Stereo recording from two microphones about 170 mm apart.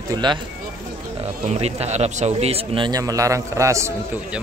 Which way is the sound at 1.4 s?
40° right (ahead or behind).